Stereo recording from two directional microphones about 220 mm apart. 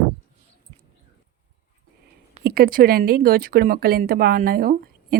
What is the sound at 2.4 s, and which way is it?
Speech, 45° right (ahead or behind).